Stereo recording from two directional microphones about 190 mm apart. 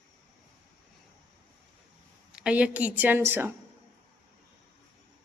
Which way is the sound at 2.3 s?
5° right (ahead or behind).